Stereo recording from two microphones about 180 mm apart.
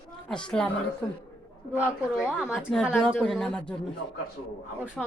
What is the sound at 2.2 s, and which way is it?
A woman's voice, 5° right (ahead or behind).